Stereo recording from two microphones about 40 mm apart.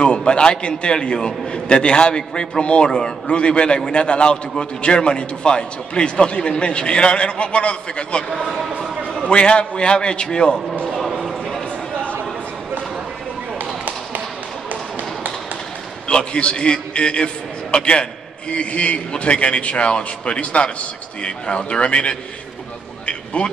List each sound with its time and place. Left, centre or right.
0.0 s a man's voice: left
9.3 s a man's voice: left
16.1 s a man's voice: left
23.0 s a sound: left